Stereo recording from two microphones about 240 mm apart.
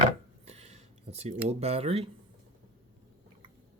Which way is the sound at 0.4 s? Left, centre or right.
Right.